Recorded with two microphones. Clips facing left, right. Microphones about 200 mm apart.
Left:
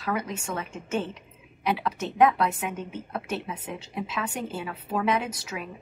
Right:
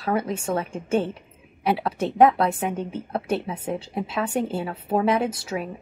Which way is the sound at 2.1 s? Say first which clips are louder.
Right 4 dB; 30° right (ahead or behind).